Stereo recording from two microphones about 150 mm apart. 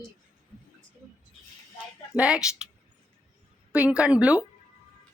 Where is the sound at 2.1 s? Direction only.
5° right (ahead or behind).